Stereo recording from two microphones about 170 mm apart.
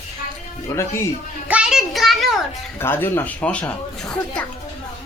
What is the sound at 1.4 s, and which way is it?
Speech, 5° right (ahead or behind).